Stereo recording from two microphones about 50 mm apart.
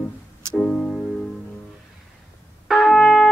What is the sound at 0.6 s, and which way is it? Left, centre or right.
Music, left.